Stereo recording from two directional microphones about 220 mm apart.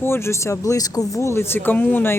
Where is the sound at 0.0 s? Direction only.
10° left (ahead or behind).